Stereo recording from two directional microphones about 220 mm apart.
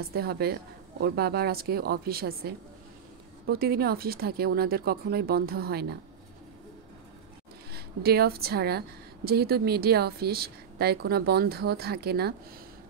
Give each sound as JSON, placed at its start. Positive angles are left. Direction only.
{"t": 0.1, "sound": "speech", "side_deg": -45}
{"t": 7.7, "sound": "speech", "side_deg": -45}